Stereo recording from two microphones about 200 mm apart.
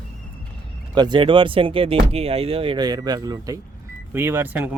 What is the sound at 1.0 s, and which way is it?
Speech, 25° right (ahead or behind).